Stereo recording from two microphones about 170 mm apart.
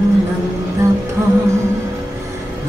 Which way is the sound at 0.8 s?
15° right (ahead or behind).